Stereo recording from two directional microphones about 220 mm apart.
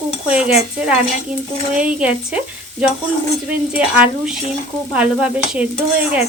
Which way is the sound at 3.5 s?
5° right (ahead or behind).